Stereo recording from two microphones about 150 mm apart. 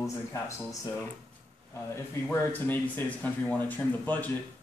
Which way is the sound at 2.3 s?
10° left (ahead or behind).